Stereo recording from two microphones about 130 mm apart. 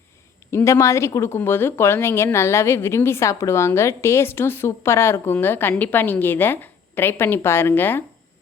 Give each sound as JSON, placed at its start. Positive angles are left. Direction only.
{"t": 0.5, "sound": "speech", "side_deg": 25}